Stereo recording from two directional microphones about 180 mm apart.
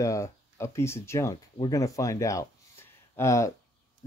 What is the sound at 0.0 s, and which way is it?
Speech, 15° left (ahead or behind).